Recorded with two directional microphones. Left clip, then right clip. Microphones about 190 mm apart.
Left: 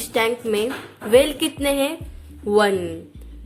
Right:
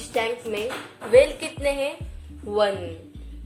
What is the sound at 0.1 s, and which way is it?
Speech, 55° left (ahead or behind).